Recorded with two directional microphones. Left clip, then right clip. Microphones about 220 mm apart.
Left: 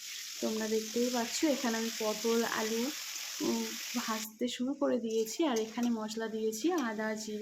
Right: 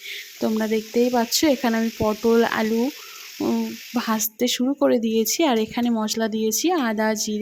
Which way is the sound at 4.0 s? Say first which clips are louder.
Right 14 dB; 45° right (ahead or behind).